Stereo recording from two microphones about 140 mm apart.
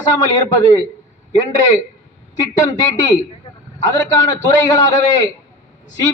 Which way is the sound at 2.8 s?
30° left (ahead or behind).